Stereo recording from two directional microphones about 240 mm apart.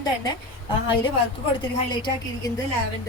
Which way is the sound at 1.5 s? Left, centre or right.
Centre.